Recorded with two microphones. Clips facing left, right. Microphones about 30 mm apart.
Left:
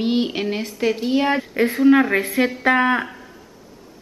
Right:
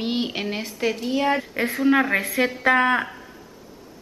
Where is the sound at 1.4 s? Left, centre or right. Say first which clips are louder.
Left 5 dB; centre.